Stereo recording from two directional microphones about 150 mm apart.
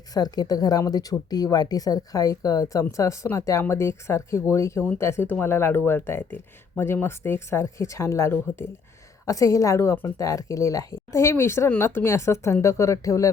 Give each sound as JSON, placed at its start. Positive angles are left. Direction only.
{"t": 0.1, "sound": "a woman's voice", "side_deg": 25}